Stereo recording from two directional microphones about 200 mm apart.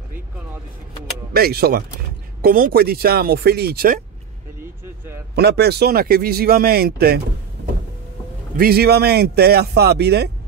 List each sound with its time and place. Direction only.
1.3 s a man's voice: 50° right (ahead or behind)
5.3 s a man's voice: 55° right (ahead or behind)
8.5 s a man's voice: 50° right (ahead or behind)